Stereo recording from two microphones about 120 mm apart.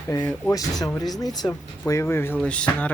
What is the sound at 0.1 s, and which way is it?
Speech, 30° left (ahead or behind).